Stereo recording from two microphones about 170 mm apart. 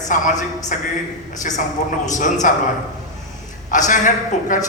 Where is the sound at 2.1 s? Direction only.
45° left (ahead or behind).